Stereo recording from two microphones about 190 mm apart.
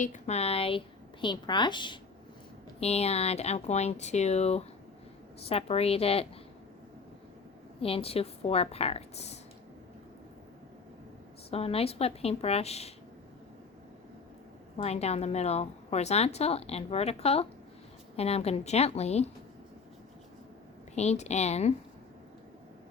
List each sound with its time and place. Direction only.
0.0 s a woman's voice: 40° left (ahead or behind)
7.8 s a woman's voice: 30° left (ahead or behind)
11.5 s a woman's voice: 30° left (ahead or behind)
14.8 s a woman's voice: 35° left (ahead or behind)
20.9 s a woman's voice: 35° left (ahead or behind)